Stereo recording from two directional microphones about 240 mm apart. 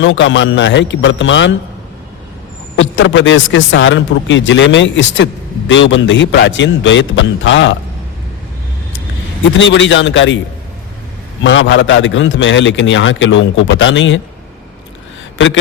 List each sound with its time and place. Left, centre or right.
0.0 s a man's voice: left
2.7 s a man's voice: left
9.6 s a man's voice: left
11.4 s a man's voice: left